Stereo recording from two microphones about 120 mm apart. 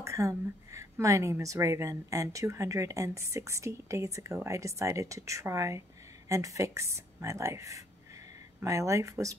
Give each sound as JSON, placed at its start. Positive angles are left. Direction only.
{"t": 0.0, "sound": "a woman's voice", "side_deg": -25}